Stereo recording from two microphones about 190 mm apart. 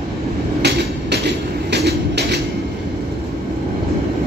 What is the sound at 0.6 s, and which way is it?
Train, 65° right (ahead or behind).